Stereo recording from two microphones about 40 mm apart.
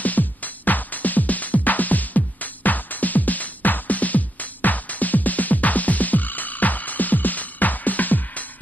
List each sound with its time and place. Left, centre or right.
0.0 s music: left